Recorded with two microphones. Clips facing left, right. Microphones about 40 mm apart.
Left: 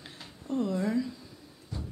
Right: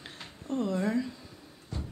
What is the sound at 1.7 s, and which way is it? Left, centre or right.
Music, right.